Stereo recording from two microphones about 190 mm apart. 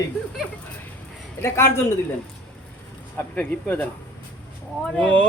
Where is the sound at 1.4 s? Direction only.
15° left (ahead or behind).